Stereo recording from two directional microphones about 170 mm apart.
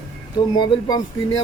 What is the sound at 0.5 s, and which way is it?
Speech, 25° left (ahead or behind).